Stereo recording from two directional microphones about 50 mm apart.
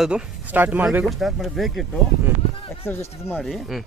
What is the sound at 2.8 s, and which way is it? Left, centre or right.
Speech, left.